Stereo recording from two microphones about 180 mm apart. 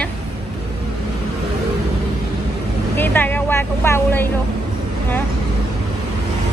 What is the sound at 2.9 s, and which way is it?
Speech, 10° left (ahead or behind).